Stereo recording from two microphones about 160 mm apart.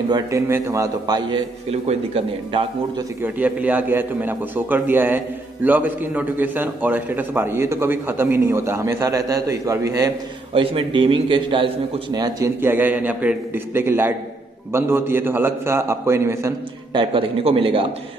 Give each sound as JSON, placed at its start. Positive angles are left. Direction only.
{"t": 0.1, "sound": "a man's voice", "side_deg": -20}
{"t": 1.7, "sound": "a man's voice", "side_deg": -40}
{"t": 3.2, "sound": "a man's voice", "side_deg": -10}
{"t": 10.5, "sound": "a man's voice", "side_deg": -35}
{"t": 16.9, "sound": "a man's voice", "side_deg": -30}